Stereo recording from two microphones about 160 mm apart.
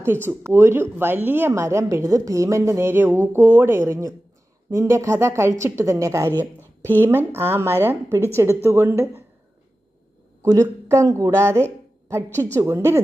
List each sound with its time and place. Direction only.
0.0 s a woman's voice: 15° right (ahead or behind)
10.4 s a woman's voice: 15° right (ahead or behind)